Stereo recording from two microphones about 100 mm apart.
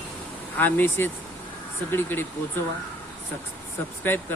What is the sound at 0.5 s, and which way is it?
Speech, 20° left (ahead or behind).